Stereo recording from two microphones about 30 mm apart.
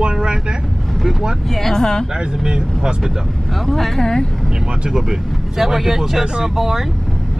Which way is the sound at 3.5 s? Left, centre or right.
Centre.